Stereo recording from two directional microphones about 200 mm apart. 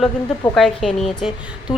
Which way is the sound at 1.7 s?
20° left (ahead or behind).